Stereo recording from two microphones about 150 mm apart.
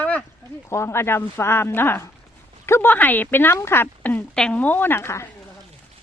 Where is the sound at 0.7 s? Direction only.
15° left (ahead or behind).